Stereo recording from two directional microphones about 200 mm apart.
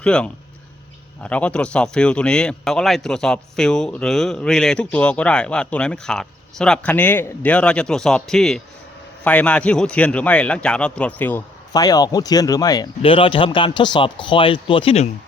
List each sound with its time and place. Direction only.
0.0 s speech: 5° left (ahead or behind); by 15.0 s 25° left (ahead or behind)